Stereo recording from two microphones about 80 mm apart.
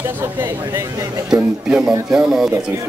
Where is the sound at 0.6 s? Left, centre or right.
Right.